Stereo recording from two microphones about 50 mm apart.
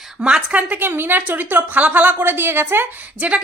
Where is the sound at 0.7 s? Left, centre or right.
Right.